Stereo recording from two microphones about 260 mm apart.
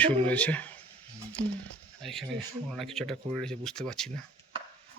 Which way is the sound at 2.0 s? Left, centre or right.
Centre.